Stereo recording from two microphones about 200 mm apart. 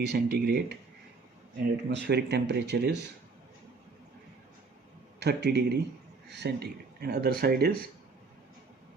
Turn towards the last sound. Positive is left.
turn(degrees=-50)  # may be behind; listen again after turning